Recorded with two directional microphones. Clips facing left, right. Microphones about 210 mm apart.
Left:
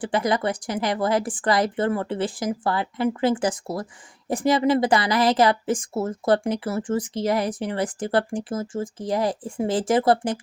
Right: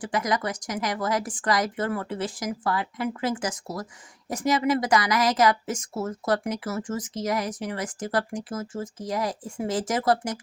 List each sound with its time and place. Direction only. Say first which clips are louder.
0.0 s speech: left 4 dB; 30° left (ahead or behind)